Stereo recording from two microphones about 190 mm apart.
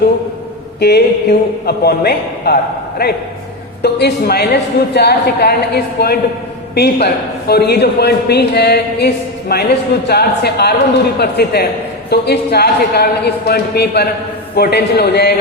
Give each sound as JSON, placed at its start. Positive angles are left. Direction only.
{"t": 0.8, "sound": "a man's voice", "side_deg": 60}